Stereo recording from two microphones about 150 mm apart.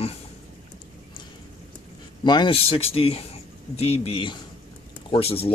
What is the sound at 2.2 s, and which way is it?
Speech, 30° left (ahead or behind).